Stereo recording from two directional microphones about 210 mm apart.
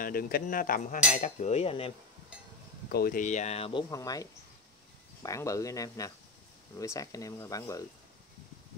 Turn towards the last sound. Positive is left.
turn(degrees=15)  # may be behind; listen again after turning